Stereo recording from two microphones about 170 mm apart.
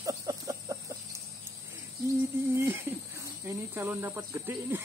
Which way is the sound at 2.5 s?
15° right (ahead or behind).